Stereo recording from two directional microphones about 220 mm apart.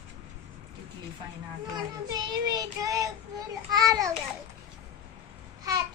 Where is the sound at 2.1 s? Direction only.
15° right (ahead or behind).